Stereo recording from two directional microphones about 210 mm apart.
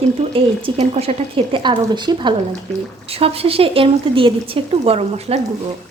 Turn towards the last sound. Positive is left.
turn(degrees=-30)  # may be behind; listen again after turning